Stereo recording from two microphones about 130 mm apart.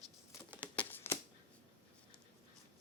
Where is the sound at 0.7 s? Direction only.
15° left (ahead or behind).